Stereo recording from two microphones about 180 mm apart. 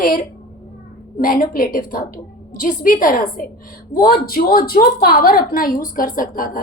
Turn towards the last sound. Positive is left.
turn(degrees=50)  # may be behind; listen again after turning